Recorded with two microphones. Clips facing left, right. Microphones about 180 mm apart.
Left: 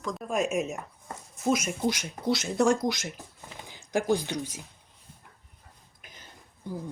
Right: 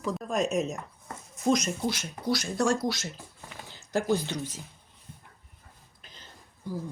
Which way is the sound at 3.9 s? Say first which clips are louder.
Left 1 dB; 15° left (ahead or behind).